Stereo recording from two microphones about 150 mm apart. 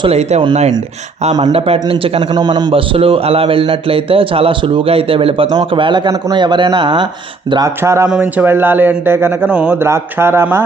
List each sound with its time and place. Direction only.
0.0 s speech: 45° right (ahead or behind)
1.3 s a man's voice: 30° right (ahead or behind)
7.8 s speech: 20° right (ahead or behind)